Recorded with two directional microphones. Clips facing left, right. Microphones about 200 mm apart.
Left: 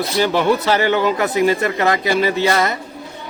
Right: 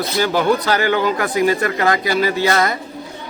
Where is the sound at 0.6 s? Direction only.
25° left (ahead or behind).